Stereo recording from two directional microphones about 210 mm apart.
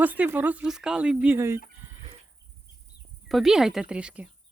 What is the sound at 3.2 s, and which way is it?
Speech, centre (ahead or behind).